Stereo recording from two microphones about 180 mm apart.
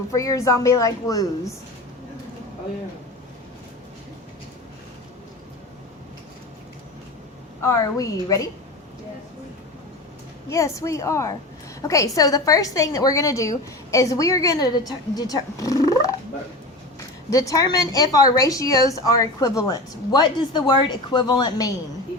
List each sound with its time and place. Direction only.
0.1 s a woman's voice: 20° left (ahead or behind)
7.6 s a woman's voice: 20° left (ahead or behind)
10.5 s a woman's voice: 15° left (ahead or behind)
17.3 s a woman's voice: 20° left (ahead or behind)